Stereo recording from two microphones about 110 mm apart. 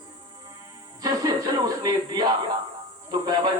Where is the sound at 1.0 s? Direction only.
35° right (ahead or behind).